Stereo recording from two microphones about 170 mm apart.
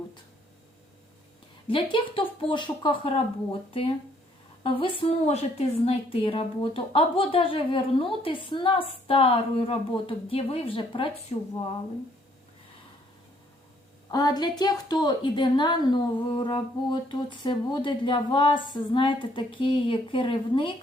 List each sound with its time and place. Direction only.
1.6 s a woman's voice: 30° left (ahead or behind)
14.1 s a woman's voice: 25° left (ahead or behind)